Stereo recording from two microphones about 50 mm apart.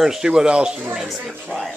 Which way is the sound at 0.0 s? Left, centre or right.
Centre.